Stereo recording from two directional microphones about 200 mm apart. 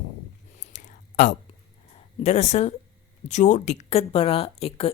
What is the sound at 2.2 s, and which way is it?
A woman's voice, 35° left (ahead or behind).